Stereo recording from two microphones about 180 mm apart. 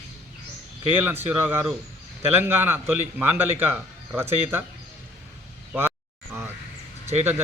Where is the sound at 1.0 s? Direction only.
10° right (ahead or behind).